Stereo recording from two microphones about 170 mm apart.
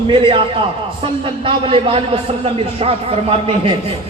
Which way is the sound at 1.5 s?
30° right (ahead or behind).